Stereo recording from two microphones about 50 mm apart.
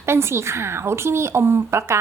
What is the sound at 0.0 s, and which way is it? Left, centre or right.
A woman's voice, right.